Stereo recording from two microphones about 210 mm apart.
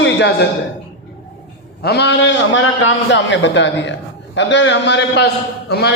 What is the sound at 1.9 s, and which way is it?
A man's voice, 55° left (ahead or behind).